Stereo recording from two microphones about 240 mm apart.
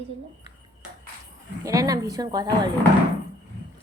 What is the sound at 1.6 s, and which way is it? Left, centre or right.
Speech, centre.